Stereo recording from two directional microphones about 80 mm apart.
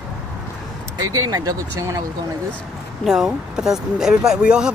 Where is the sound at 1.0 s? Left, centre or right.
Right.